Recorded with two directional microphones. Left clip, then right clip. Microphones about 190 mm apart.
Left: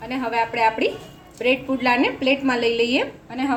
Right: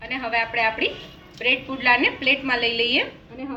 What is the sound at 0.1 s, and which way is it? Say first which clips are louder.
A woman's voice: left 1 dB; 50° left (ahead or behind).